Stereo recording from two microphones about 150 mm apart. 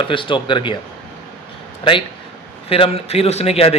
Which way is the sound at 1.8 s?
35° left (ahead or behind).